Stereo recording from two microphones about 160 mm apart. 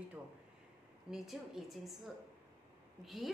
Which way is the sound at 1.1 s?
Centre (ahead or behind).